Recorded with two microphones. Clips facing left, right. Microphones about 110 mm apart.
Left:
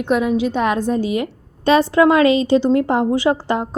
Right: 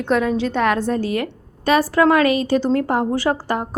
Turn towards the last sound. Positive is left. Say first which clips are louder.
# left 3 dB
turn(degrees=20)  # may be behind; listen again after turning